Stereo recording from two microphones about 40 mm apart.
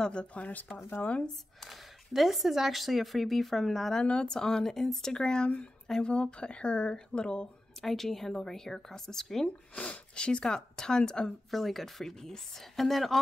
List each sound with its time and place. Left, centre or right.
0.0 s speech: left
1.6 s speech: centre
3.9 s speech: left
4.4 s a woman's voice: centre
5.1 s speech: left
7.8 s a woman's voice: centre
9.8 s speech: left
11.5 s speech: centre